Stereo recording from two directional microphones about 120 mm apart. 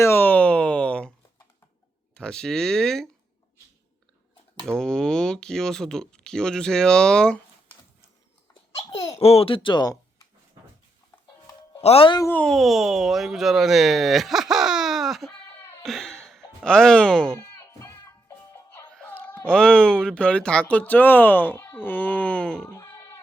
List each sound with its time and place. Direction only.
0.0 s a sound: 15° left (ahead or behind)
2.1 s speech: 5° left (ahead or behind)
4.8 s speech: 5° left (ahead or behind)
8.9 s speech: 55° left (ahead or behind); by 10.0 s 35° left (ahead or behind)
11.8 s speech: 55° left (ahead or behind)
12.3 s speech: 10° left (ahead or behind)
12.5 s speech: centre (ahead or behind)
15.8 s a sound: 5° left (ahead or behind)
17.6 s music: 25° left (ahead or behind)
18.9 s a sound: 10° left (ahead or behind)
19.5 s speech: 5° left (ahead or behind)
22.7 s a sound: 25° left (ahead or behind)